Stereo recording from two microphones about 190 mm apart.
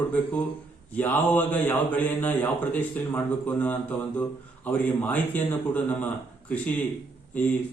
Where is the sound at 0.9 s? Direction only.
10° left (ahead or behind).